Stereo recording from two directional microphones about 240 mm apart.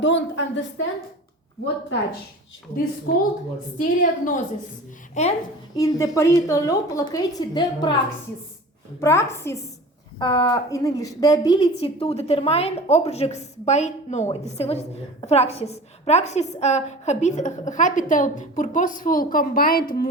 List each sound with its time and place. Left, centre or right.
0.0 s a woman's voice: left
3.1 s a woman's voice: left
5.7 s speech: centre
9.0 s a woman's voice: centre; by 20.1 s left